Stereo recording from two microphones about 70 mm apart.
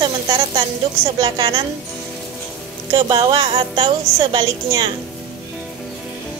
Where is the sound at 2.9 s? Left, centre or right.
Right.